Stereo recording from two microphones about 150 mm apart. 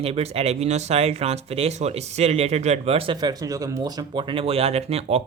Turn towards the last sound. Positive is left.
turn(degrees=-40)  # may be behind; listen again after turning